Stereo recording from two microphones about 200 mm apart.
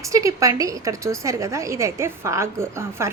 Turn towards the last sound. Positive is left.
turn(degrees=-15)  # may be behind; listen again after turning